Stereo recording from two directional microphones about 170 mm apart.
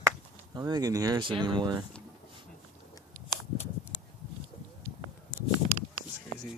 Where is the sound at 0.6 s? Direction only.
20° right (ahead or behind).